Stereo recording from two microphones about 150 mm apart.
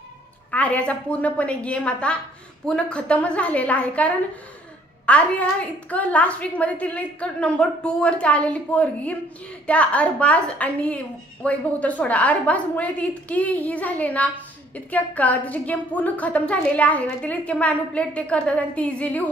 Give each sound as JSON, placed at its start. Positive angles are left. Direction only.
{"t": 0.5, "sound": "a woman's voice", "side_deg": 10}